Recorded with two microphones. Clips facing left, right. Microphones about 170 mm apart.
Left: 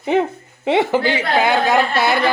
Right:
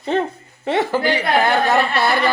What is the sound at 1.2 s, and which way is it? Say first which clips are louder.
Speech: even; 5° left (ahead or behind).